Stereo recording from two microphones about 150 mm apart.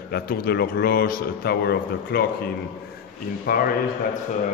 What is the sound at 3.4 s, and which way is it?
Speech, 80° left.